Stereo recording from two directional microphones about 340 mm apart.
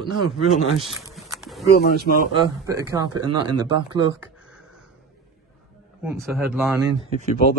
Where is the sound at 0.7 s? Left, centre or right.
Centre.